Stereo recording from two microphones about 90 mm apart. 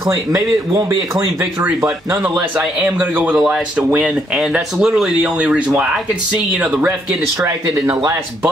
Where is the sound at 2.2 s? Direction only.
15° right (ahead or behind).